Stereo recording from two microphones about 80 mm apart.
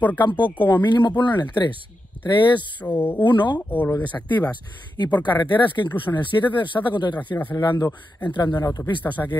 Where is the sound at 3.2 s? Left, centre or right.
Left.